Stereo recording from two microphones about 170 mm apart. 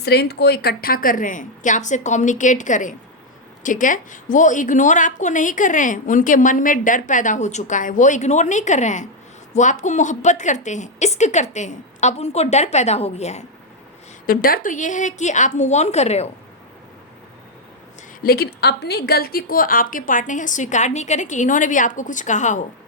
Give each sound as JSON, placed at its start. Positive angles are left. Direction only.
{"t": 0.0, "sound": "a woman's voice", "side_deg": 75}
{"t": 14.3, "sound": "a woman's voice", "side_deg": 60}
{"t": 18.2, "sound": "a woman's voice", "side_deg": 65}